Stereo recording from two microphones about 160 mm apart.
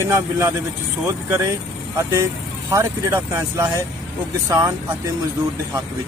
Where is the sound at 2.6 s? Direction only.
15° right (ahead or behind).